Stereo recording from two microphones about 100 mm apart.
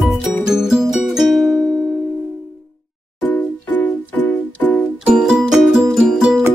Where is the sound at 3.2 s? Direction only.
15° left (ahead or behind).